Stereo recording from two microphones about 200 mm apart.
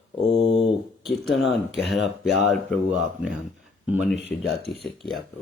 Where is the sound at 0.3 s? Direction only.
60° left (ahead or behind).